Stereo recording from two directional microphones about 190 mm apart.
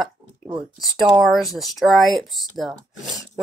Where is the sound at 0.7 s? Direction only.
Centre (ahead or behind).